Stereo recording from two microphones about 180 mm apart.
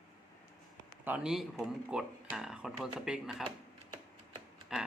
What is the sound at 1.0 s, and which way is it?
Speech, 5° right (ahead or behind).